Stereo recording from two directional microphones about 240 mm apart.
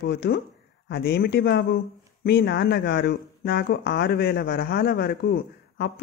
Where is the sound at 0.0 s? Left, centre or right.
Left.